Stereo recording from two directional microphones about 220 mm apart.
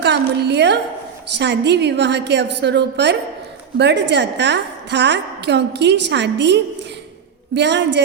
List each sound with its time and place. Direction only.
0.0 s a woman's voice: 50° right (ahead or behind)